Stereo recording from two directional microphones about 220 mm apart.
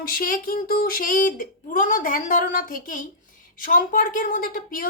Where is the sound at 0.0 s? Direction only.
40° left (ahead or behind).